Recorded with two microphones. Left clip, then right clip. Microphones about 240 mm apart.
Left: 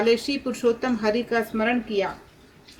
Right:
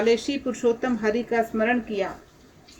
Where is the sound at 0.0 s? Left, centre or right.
Left.